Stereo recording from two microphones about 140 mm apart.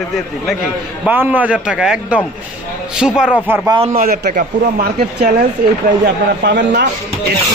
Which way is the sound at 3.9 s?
85° right.